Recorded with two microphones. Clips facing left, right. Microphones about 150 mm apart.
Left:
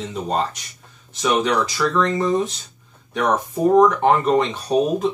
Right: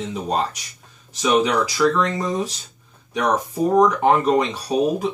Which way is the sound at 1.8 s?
5° right (ahead or behind).